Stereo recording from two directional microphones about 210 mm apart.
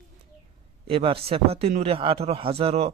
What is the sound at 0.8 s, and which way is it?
A man's voice, 25° right (ahead or behind).